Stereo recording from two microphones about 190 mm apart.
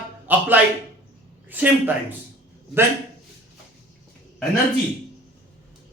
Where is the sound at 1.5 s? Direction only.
10° right (ahead or behind).